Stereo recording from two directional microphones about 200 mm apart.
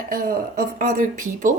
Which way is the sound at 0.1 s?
45° right (ahead or behind).